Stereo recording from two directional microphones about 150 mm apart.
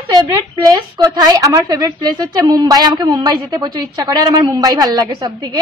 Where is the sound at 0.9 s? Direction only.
30° right (ahead or behind).